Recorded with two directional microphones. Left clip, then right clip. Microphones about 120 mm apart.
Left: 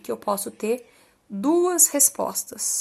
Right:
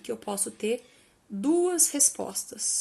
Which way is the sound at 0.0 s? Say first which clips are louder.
Left 7 dB; 35° left (ahead or behind).